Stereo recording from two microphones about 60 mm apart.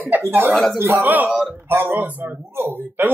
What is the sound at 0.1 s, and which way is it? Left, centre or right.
Speech, right.